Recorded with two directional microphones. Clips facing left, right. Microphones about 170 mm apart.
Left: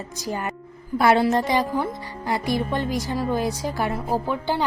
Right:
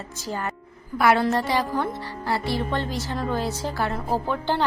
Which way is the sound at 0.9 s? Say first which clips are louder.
Left 2 dB; 25° left (ahead or behind).